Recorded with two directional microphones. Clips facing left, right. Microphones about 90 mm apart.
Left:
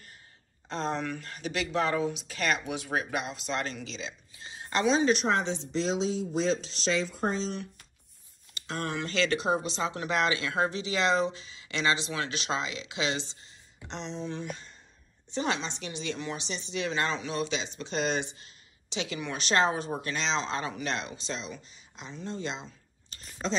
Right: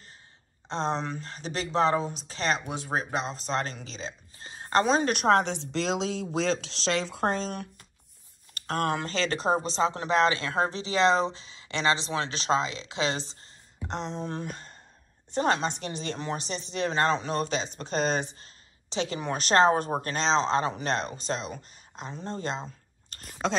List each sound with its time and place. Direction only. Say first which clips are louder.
0.7 s a woman's voice: right 2 dB; 25° right (ahead or behind); by 23.5 s 55° right (ahead or behind)